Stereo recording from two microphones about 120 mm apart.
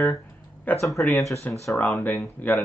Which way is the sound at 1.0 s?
Centre (ahead or behind).